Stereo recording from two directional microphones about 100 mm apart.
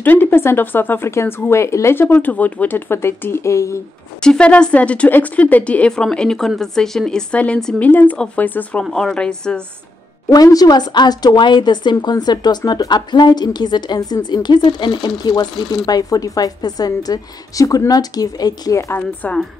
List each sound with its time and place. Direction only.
0.0 s speech: 20° left (ahead or behind)
4.2 s speech: 10° left (ahead or behind)
8.8 s speech: 5° left (ahead or behind)
10.3 s a woman's voice: 40° left (ahead or behind)
19.2 s speech: 15° left (ahead or behind)